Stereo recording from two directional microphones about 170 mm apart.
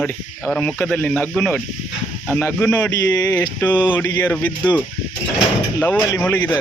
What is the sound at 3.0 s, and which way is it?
Speech, 25° left (ahead or behind).